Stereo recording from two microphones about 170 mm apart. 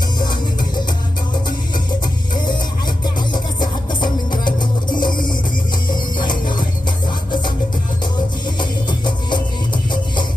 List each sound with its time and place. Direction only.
2.4 s music: 25° left (ahead or behind)